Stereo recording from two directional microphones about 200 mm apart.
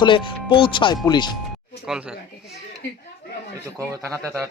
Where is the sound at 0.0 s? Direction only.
25° left (ahead or behind).